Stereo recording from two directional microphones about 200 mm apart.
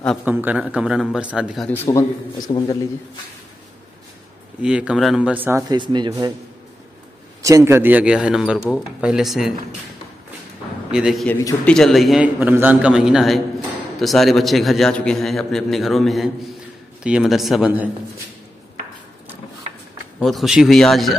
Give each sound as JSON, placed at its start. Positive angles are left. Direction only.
{"t": 0.2, "sound": "a man's voice", "side_deg": -10}
{"t": 1.7, "sound": "a man's voice", "side_deg": 15}
{"t": 4.6, "sound": "speech", "side_deg": -5}
{"t": 7.4, "sound": "a man's voice", "side_deg": -15}
{"t": 10.9, "sound": "a man's voice", "side_deg": -5}
{"t": 11.2, "sound": "a man's voice", "side_deg": 5}
{"t": 20.2, "sound": "a man's voice", "side_deg": 0}